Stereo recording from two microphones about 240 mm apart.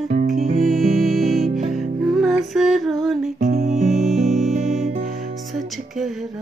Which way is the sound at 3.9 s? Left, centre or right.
Centre.